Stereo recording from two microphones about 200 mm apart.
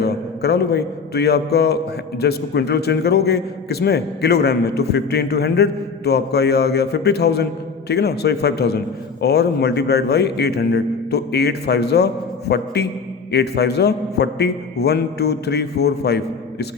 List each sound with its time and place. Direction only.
0.0 s a man's voice: 55° left (ahead or behind)